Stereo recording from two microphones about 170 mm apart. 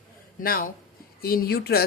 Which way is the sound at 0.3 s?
55° left (ahead or behind).